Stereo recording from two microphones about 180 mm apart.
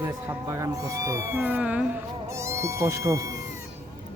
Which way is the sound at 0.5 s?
15° right (ahead or behind).